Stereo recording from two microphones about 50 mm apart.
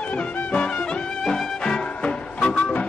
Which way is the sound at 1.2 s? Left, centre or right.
Centre.